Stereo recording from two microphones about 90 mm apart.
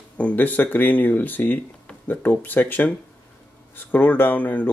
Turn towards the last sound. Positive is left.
turn(degrees=15)  # may be behind; listen again after turning